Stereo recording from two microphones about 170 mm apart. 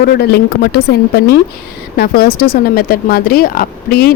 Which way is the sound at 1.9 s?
65° left (ahead or behind).